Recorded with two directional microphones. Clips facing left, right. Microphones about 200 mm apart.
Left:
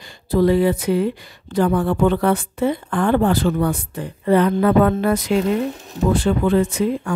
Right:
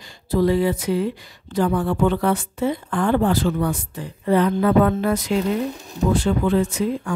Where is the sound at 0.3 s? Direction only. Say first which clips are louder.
Left 3 dB; 60° left (ahead or behind).